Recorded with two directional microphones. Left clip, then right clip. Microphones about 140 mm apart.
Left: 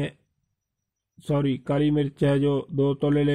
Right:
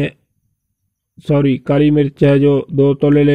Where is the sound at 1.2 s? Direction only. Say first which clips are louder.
Right 11 dB; 35° right (ahead or behind).